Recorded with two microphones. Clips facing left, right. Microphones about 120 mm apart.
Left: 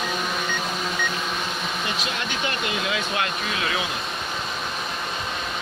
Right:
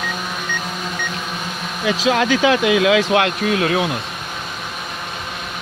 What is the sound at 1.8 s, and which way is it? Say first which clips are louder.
Speech: right 11 dB; 90° right.